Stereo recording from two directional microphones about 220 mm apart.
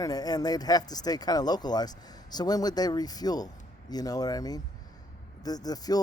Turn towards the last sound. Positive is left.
turn(degrees=15)  # may be behind; listen again after turning